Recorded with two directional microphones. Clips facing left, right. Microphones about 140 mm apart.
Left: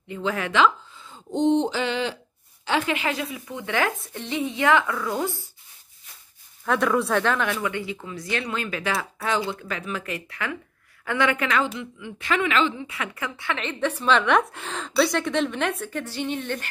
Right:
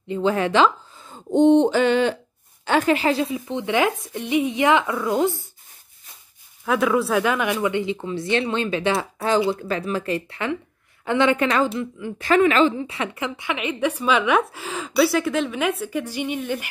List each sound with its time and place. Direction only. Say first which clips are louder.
0.1 s speech: right 6 dB; 30° right (ahead or behind)
1.0 s a sound: right 6 dB; 50° right (ahead or behind)
2.6 s speech: right 6 dB; 45° right (ahead or behind); by 5.3 s 20° right (ahead or behind)
6.6 s speech: right 2 dB; 5° right (ahead or behind)
7.6 s a woman's voice: right 6 dB; 25° right (ahead or behind)